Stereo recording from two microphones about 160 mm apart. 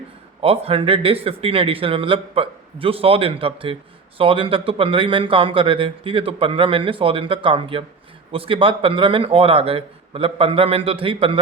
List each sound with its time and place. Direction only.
0.4 s speech: 35° right (ahead or behind)